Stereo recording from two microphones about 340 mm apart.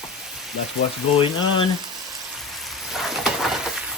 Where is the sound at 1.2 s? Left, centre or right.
Centre.